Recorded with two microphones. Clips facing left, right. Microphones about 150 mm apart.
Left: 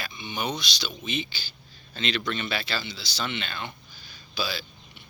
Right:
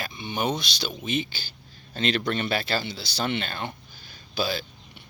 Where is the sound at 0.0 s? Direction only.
50° right (ahead or behind).